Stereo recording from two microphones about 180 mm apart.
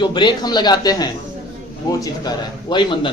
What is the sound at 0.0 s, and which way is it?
Speech, 25° left (ahead or behind).